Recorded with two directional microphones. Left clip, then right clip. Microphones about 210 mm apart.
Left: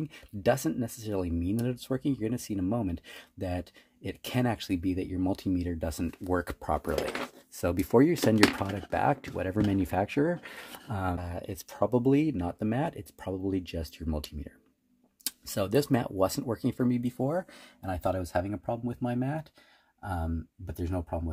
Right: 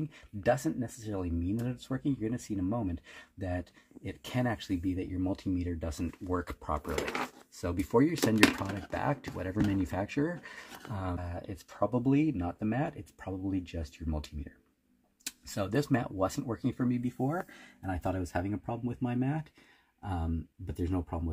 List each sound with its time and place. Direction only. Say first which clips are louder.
0.1 s speech: left 2 dB; 55° left (ahead or behind)